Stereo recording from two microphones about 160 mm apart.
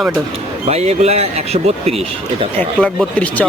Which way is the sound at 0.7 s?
40° right (ahead or behind).